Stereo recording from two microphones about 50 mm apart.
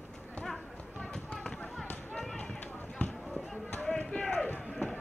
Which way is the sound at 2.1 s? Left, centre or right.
Centre.